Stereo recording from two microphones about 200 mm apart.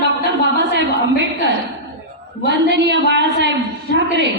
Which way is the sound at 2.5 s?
60° right (ahead or behind).